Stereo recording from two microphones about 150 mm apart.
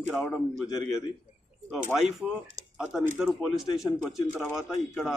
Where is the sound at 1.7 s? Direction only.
Centre (ahead or behind).